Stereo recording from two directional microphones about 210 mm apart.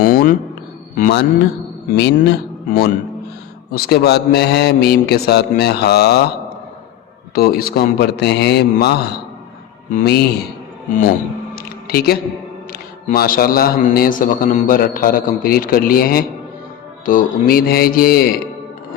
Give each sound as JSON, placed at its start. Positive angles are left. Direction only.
{"t": 0.0, "sound": "a man's voice", "side_deg": 45}
{"t": 2.0, "sound": "a man's voice", "side_deg": 55}
{"t": 7.3, "sound": "a man's voice", "side_deg": 45}
{"t": 11.5, "sound": "a sound", "side_deg": 45}
{"t": 12.7, "sound": "a man's voice", "side_deg": 45}